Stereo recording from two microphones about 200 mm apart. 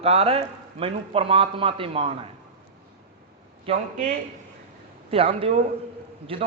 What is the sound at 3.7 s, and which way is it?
Speech, 30° right (ahead or behind).